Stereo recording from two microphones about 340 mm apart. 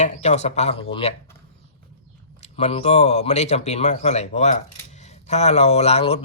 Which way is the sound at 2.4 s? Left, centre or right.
Centre.